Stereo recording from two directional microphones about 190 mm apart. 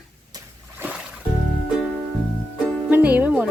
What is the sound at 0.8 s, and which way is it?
Music, 10° right (ahead or behind).